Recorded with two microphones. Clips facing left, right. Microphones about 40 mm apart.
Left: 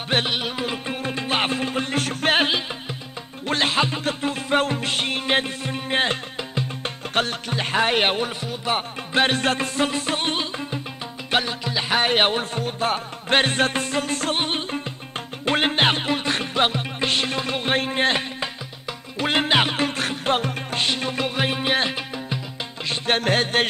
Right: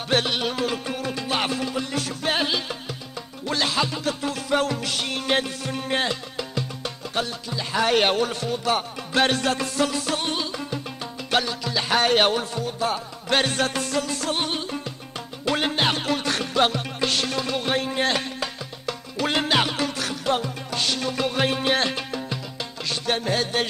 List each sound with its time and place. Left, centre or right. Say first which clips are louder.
0.1 s music: even; left
7.2 s music: left 5 dB; left
7.8 s music: right 2 dB; left
12.5 s music: left 2 dB; left
21.4 s music: even; centre
23.1 s music: left 5 dB; left